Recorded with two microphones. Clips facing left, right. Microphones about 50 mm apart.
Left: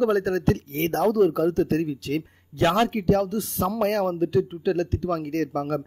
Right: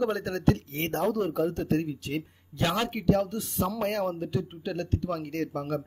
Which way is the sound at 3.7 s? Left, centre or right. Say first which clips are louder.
Left 7 dB; left.